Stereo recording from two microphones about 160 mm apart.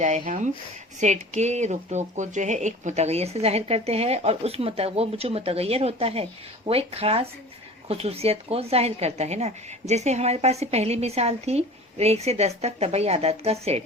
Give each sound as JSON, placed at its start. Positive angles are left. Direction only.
{"t": 0.0, "sound": "speech", "side_deg": -50}